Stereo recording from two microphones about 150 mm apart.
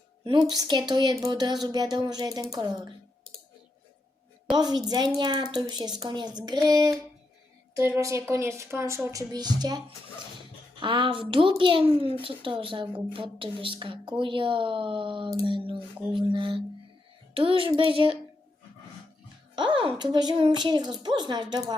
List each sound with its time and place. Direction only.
0.3 s a woman's voice: 30° right (ahead or behind)
4.5 s a woman's voice: 25° right (ahead or behind)
19.5 s a woman's voice: 35° right (ahead or behind)